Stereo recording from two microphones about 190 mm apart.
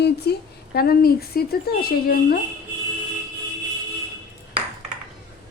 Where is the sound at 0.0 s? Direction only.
60° left (ahead or behind).